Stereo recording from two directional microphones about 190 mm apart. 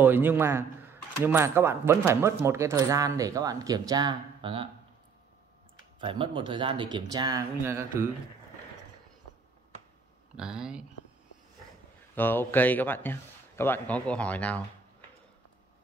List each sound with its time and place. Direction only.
0.0 s speech: 10° right (ahead or behind); by 4.6 s 25° right (ahead or behind)
5.9 s speech: 30° right (ahead or behind)
10.3 s speech: 5° right (ahead or behind)
12.2 s a man's voice: 10° left (ahead or behind)